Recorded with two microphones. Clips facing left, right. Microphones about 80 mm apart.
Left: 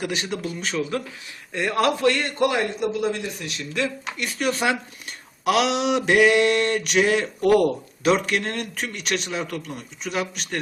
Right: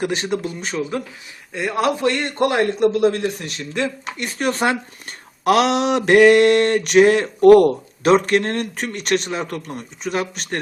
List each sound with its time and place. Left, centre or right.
0.0 s speech: right
0.3 s speech: right
1.5 s a man's voice: centre; by 2.3 s right
2.4 s speech: right